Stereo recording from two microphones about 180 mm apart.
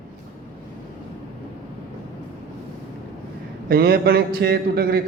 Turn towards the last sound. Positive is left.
turn(degrees=-60)  # may be behind; listen again after turning